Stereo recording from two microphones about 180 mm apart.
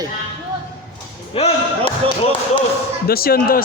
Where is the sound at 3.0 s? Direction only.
55° left (ahead or behind).